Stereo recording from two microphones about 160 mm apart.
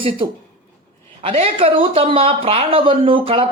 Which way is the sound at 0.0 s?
35° right (ahead or behind).